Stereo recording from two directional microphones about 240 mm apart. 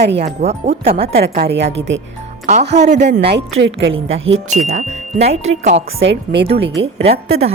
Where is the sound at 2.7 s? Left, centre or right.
Right.